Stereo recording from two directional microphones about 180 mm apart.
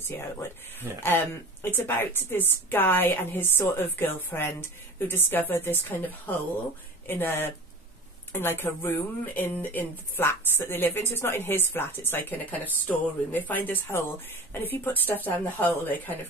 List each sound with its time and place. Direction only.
1.0 s a woman's voice: 10° left (ahead or behind)